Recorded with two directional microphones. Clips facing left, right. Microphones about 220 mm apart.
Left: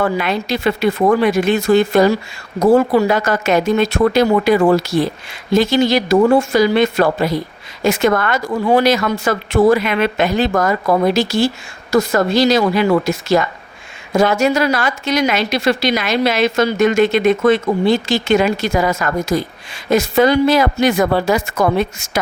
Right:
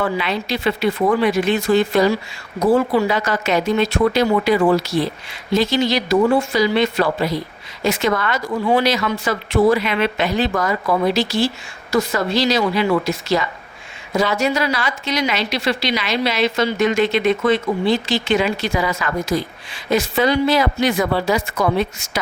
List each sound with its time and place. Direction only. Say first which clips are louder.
0.0 s a woman's voice: left 3 dB; 50° left (ahead or behind)